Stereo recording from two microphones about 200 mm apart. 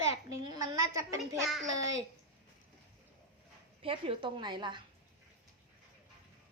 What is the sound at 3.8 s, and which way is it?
A woman's voice, 25° right (ahead or behind).